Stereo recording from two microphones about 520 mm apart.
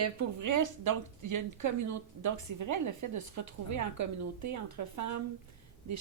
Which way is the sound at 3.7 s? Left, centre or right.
Right.